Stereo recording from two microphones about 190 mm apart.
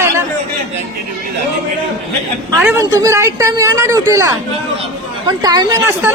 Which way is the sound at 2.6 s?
15° right (ahead or behind).